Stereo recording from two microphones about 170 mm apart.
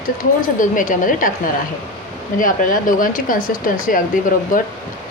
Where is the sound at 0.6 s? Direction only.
50° left (ahead or behind).